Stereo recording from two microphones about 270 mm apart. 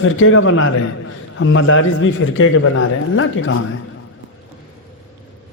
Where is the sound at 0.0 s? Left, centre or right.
Left.